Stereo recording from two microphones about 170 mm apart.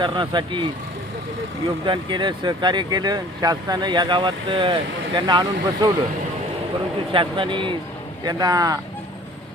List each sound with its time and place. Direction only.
0.0 s speech: 30° right (ahead or behind)
1.8 s speech: 30° right (ahead or behind)
7.1 s speech: 30° right (ahead or behind)